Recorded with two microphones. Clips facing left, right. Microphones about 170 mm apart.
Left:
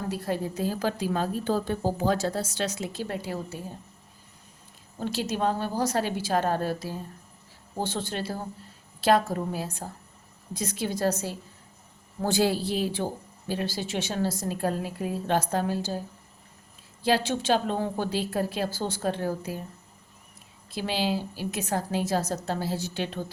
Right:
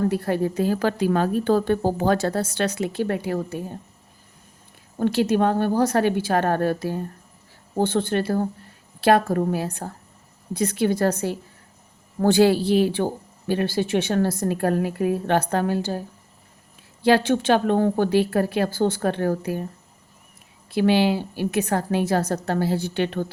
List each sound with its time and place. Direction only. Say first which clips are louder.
0.1 s a woman's voice: right 7 dB; 60° right (ahead or behind)
4.9 s a woman's voice: right 9 dB; 60° right (ahead or behind)
17.0 s a woman's voice: right 7 dB; 60° right (ahead or behind)
20.7 s a woman's voice: right 9 dB; 60° right (ahead or behind)